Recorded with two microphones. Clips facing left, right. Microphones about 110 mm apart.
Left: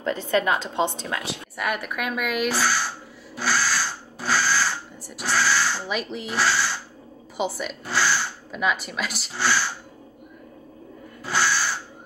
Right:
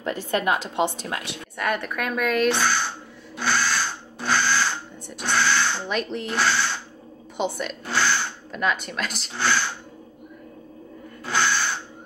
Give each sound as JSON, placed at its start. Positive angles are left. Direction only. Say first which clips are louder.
{"t": 0.1, "sound": "a woman's voice", "louder": "left 1 dB", "side_deg": 25}
{"t": 1.3, "sound": "speech", "louder": "right 4 dB", "side_deg": 5}
{"t": 3.3, "sound": "drill", "louder": "even", "side_deg": 5}
{"t": 7.3, "sound": "speech", "louder": "right 1 dB", "side_deg": 5}
{"t": 11.2, "sound": "owl", "louder": "even", "side_deg": 5}